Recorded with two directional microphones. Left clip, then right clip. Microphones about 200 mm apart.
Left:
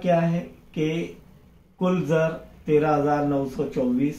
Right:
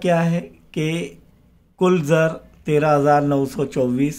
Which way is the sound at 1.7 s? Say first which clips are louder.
Right 6 dB; 55° right (ahead or behind).